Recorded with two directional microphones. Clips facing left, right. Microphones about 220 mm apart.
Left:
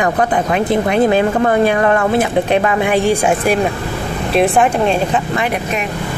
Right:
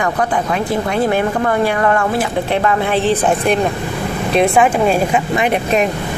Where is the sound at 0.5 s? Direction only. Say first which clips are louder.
Left 6 dB; 20° left (ahead or behind); by 5.2 s 5° right (ahead or behind).